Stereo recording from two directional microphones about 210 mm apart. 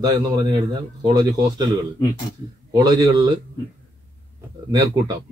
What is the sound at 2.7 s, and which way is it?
Speech, 20° right (ahead or behind).